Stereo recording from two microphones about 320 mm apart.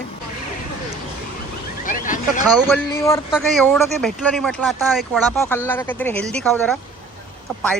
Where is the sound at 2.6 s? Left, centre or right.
Centre.